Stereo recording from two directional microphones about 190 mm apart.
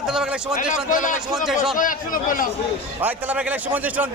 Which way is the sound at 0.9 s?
45° left (ahead or behind).